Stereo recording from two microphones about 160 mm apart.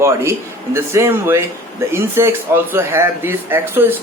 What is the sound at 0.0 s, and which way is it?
Speech, 15° right (ahead or behind).